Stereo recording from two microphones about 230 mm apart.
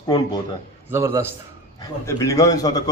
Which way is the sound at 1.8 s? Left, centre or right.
Centre.